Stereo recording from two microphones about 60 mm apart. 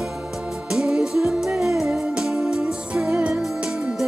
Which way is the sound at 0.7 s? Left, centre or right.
Centre.